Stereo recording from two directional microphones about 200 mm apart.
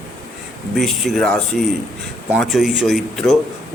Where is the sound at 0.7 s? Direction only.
Centre (ahead or behind).